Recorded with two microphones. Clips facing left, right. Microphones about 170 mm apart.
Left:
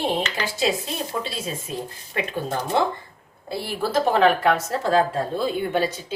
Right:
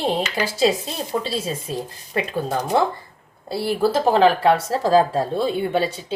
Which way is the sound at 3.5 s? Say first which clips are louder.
Right 5 dB; 30° right (ahead or behind).